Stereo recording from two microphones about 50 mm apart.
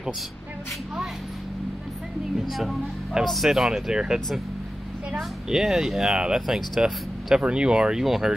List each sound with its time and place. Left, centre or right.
2.3 s speech: centre
8.0 s speech: centre